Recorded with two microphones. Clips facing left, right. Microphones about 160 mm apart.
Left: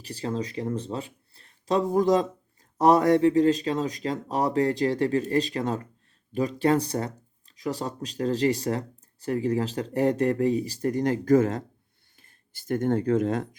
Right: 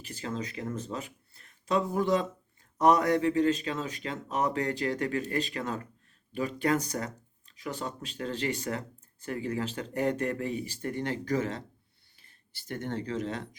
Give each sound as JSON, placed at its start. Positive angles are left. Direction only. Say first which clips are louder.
{"t": 0.0, "sound": "speech", "louder": "left 6 dB", "side_deg": 35}